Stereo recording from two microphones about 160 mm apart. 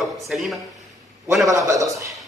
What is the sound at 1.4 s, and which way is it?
Speech, 20° right (ahead or behind).